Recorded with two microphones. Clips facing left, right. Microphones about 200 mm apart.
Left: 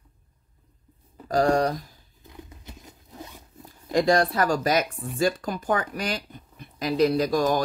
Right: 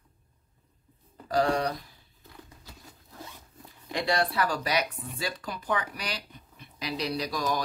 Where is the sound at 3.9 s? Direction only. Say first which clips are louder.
Left 7 dB; 45° left (ahead or behind).